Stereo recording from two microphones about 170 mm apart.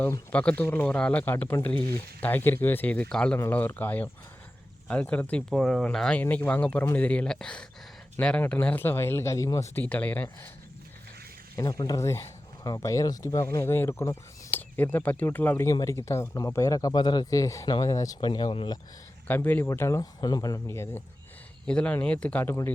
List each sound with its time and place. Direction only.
0.0 s speech: 10° left (ahead or behind)
11.5 s speech: 20° left (ahead or behind)
19.3 s speech: 10° left (ahead or behind)